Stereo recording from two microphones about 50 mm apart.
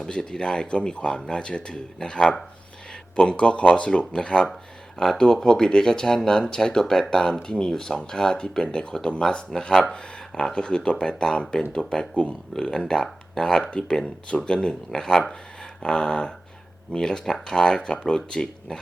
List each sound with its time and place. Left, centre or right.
0.0 s speech: centre
9.5 s speech: centre